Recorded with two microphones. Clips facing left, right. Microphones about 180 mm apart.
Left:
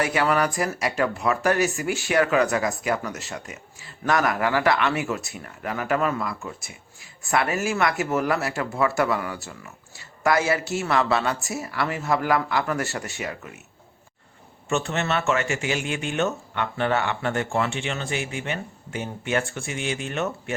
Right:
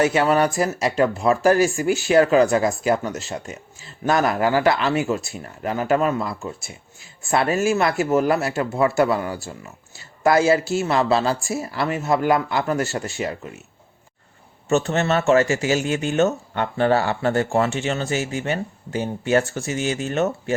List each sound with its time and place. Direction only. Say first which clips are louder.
0.0 s speech: right 4 dB; 25° right (ahead or behind)
14.7 s speech: right 5 dB; 40° right (ahead or behind)